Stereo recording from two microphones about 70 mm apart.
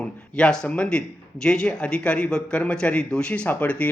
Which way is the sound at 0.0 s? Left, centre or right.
Centre.